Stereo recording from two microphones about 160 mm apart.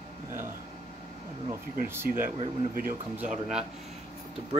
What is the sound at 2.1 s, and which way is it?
Speech, 60° right (ahead or behind).